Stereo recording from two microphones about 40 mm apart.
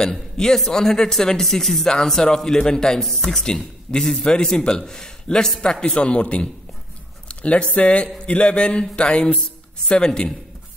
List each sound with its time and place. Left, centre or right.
0.0 s a man's voice: centre
3.0 s speech: centre
3.4 s a man's voice: centre
5.9 s speech: left